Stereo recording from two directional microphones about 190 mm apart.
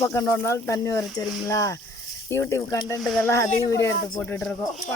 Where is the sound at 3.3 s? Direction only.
15° left (ahead or behind).